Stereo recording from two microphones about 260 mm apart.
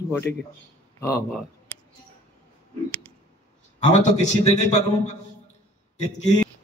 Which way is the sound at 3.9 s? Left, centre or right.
Left.